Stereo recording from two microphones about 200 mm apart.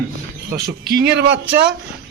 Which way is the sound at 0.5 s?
50° right (ahead or behind).